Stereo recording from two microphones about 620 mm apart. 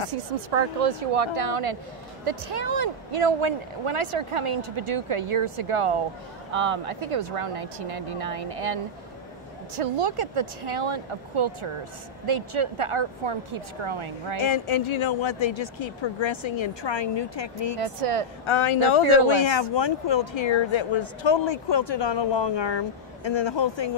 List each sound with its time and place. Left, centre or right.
0.1 s speech: right
9.8 s speech: right
14.4 s speech: left
17.7 s speech: right
18.4 s speech: left